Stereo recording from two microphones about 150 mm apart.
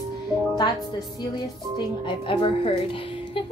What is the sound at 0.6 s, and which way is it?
A woman's voice, 30° left (ahead or behind).